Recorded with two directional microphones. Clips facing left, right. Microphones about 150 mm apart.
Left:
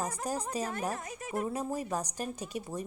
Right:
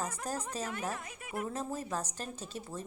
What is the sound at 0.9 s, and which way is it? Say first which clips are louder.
Speech: left 4 dB; 40° left (ahead or behind).